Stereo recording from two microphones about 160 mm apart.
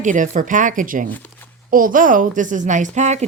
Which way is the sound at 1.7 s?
60° right (ahead or behind).